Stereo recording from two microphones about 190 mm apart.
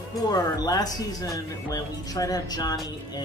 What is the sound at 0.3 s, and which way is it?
Speech, 20° left (ahead or behind).